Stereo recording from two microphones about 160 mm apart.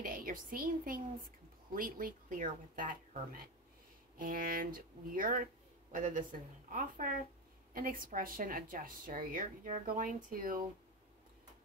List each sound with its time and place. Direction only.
0.0 s a woman's voice: 60° right (ahead or behind)